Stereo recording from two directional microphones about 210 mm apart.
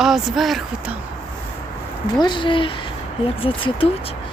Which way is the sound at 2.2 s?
20° left (ahead or behind).